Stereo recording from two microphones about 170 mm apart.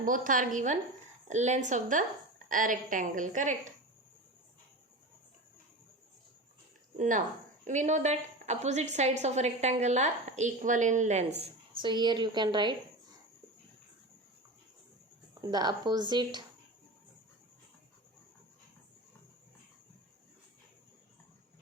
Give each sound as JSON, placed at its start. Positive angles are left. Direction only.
{"t": 0.0, "sound": "a woman's voice", "side_deg": -50}
{"t": 6.9, "sound": "a woman's voice", "side_deg": -45}
{"t": 15.4, "sound": "speech", "side_deg": -25}